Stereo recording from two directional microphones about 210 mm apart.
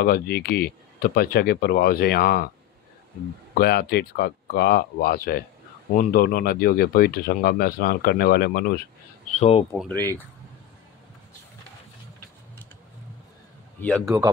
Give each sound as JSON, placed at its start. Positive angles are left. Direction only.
{"t": 0.0, "sound": "speech", "side_deg": 45}
{"t": 3.5, "sound": "speech", "side_deg": 45}
{"t": 9.4, "sound": "speech", "side_deg": 30}
{"t": 9.8, "sound": "speech", "side_deg": 10}
{"t": 13.7, "sound": "speech", "side_deg": 5}